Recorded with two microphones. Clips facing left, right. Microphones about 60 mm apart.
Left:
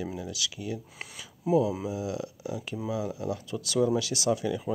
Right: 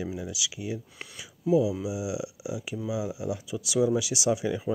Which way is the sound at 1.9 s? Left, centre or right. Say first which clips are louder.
Right 1 dB; centre.